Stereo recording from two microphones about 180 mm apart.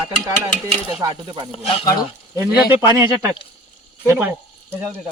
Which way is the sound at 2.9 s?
15° right (ahead or behind).